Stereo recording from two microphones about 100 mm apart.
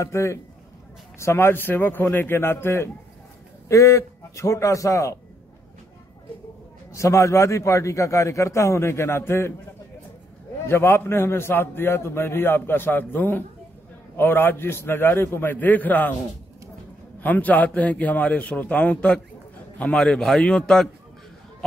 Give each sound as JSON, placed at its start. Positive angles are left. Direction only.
{"t": 0.0, "sound": "a man's voice", "side_deg": 30}
{"t": 6.9, "sound": "a man's voice", "side_deg": 30}
{"t": 10.7, "sound": "a man's voice", "side_deg": 25}
{"t": 17.2, "sound": "a man's voice", "side_deg": 15}